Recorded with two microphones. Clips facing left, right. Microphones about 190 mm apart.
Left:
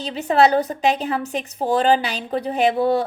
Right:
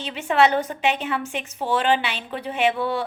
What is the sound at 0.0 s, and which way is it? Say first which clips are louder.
A woman's voice: left 3 dB; 35° left (ahead or behind).